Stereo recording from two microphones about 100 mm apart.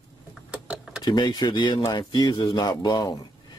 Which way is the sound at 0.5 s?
10° right (ahead or behind).